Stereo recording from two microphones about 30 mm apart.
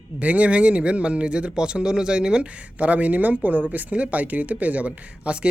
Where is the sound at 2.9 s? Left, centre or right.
Right.